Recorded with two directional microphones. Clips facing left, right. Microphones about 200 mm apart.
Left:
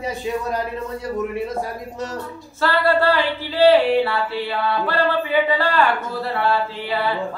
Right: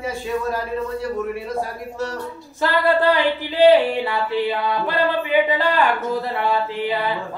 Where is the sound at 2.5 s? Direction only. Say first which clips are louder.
Even; 15° right (ahead or behind).